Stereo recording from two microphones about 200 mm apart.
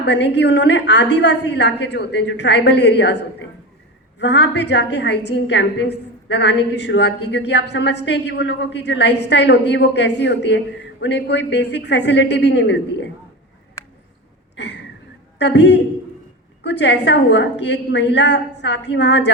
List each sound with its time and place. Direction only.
0.0 s a woman's voice: 60° left (ahead or behind)
14.5 s a sound: 60° left (ahead or behind)
15.4 s a woman's voice: 60° left (ahead or behind)